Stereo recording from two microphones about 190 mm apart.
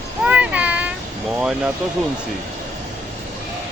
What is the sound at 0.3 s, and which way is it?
Vehicle, 5° right (ahead or behind).